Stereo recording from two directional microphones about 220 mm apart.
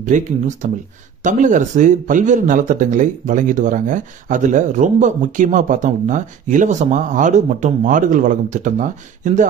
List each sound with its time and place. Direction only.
0.0 s speech: 35° right (ahead or behind)